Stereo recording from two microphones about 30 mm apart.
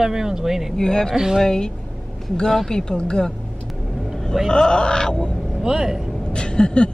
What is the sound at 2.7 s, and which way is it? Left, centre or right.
Speech, left.